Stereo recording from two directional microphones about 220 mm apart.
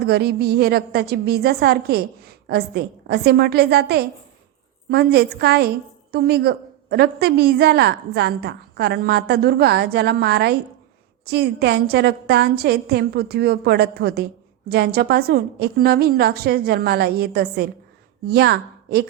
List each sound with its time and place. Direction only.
0.0 s a woman's voice: 45° right (ahead or behind)